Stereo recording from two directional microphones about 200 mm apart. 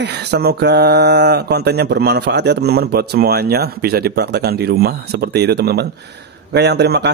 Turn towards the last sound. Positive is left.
turn(degrees=-55)  # may be behind; listen again after turning